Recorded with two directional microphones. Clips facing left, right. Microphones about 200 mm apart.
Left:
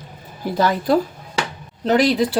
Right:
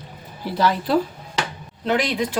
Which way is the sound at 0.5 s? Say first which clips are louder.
Left 2 dB; 45° left (ahead or behind).